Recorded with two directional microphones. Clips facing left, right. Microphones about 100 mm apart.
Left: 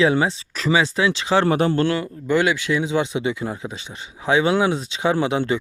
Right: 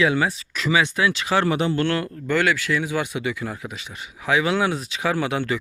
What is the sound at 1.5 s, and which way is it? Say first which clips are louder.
Speech: left 3 dB; 40° left (ahead or behind).